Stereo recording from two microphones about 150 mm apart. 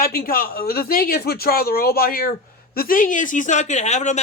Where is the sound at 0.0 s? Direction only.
85° left.